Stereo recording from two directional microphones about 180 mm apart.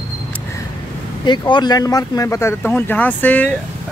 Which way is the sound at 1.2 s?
25° left (ahead or behind).